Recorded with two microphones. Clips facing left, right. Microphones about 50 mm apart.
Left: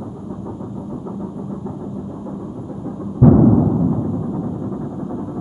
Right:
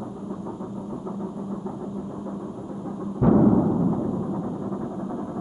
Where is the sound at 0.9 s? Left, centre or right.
Centre.